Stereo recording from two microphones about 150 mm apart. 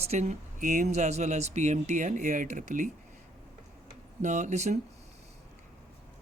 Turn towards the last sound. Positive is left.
turn(degrees=-50)  # may be behind; listen again after turning